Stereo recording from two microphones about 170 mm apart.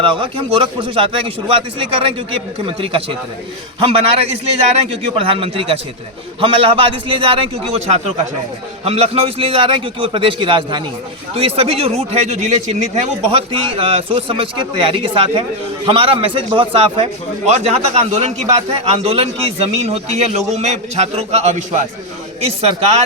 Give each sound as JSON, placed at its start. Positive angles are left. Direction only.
{"t": 0.0, "sound": "a man's voice", "side_deg": -30}